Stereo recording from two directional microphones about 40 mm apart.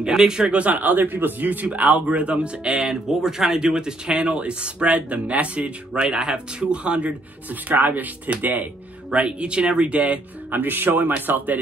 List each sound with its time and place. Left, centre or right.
0.0 s a man's voice: centre
0.4 s speech: right
0.7 s a man's voice: right
2.9 s speech: centre; by 7.2 s right
7.6 s speech: right
9.1 s speech: right
10.5 s speech: right